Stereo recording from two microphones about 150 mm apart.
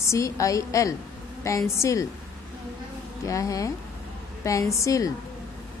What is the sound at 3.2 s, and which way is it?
A woman's voice, 20° left (ahead or behind).